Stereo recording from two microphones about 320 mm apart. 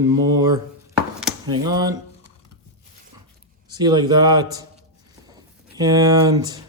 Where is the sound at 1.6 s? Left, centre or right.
Centre.